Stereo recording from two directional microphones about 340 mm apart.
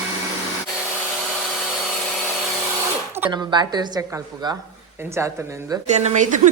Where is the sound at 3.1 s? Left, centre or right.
Centre.